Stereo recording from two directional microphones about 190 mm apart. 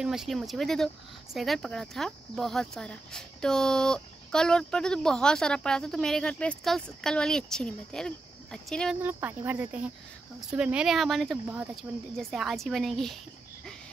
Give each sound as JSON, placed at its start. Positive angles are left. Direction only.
{"t": 0.0, "sound": "speech", "side_deg": 0}
{"t": 9.0, "sound": "speech", "side_deg": -10}